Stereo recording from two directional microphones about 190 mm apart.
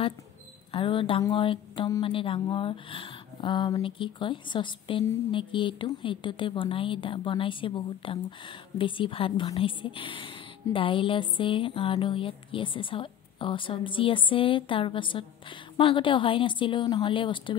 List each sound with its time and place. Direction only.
0.7 s a woman's voice: 25° left (ahead or behind)